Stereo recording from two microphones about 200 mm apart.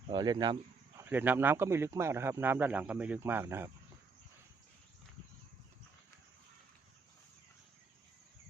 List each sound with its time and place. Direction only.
0.1 s speech: 20° right (ahead or behind)
0.9 s a man's voice: 10° right (ahead or behind)